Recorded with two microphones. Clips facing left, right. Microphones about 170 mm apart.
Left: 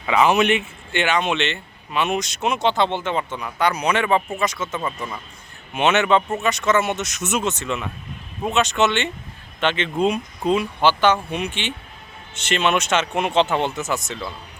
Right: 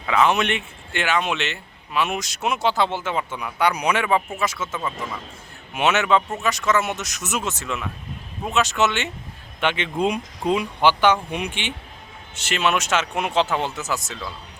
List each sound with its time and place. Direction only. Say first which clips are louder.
0.1 s speech: left 3 dB; 5° left (ahead or behind)
4.9 s a man's voice: even; 90° right
5.7 s speech: left 2 dB; 5° right (ahead or behind)
12.3 s speech: left 2 dB; centre (ahead or behind)